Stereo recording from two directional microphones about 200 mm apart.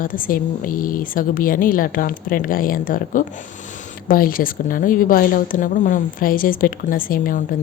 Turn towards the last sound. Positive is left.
turn(degrees=45)  # may be behind; listen again after turning